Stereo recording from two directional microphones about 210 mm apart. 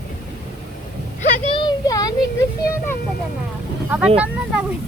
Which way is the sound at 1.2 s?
25° left (ahead or behind).